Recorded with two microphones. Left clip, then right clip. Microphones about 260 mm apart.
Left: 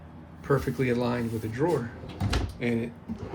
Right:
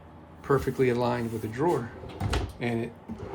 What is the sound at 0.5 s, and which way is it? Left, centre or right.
Speech, centre.